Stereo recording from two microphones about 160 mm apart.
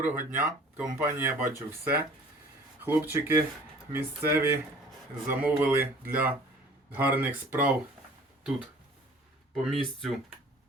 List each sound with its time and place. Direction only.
0.0 s speech: 10° right (ahead or behind)
9.6 s speech: centre (ahead or behind)